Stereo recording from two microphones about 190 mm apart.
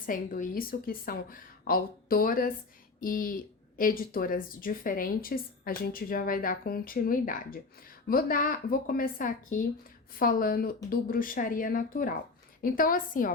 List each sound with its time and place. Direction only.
0.0 s speech: 45° left (ahead or behind)